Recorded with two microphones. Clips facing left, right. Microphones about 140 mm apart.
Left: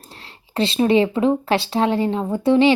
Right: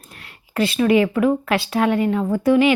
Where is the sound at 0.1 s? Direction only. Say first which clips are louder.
Left 1 dB; 30° left (ahead or behind).